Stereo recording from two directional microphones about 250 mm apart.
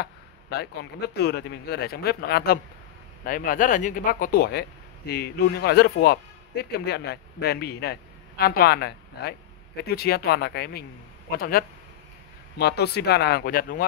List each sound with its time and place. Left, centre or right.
0.0 s speech: left